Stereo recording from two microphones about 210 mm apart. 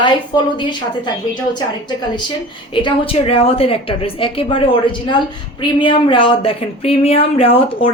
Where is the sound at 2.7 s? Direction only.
25° left (ahead or behind).